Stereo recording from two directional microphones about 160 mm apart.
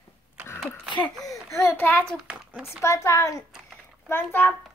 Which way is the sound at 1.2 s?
20° left (ahead or behind).